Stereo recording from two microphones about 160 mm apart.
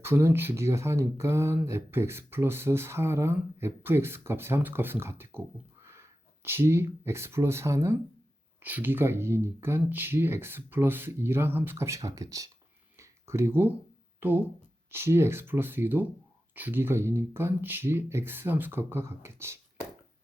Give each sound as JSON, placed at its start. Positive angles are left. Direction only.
{"t": 0.0, "sound": "speech", "side_deg": -15}
{"t": 13.0, "sound": "a sound", "side_deg": -15}
{"t": 14.2, "sound": "speech", "side_deg": -15}